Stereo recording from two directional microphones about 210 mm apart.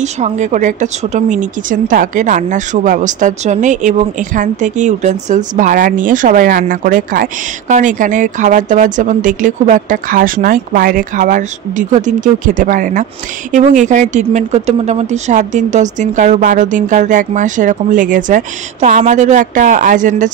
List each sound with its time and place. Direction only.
0.0 s speech: 35° right (ahead or behind)